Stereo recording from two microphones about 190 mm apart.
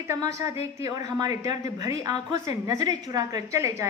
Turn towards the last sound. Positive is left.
turn(degrees=-15)  # may be behind; listen again after turning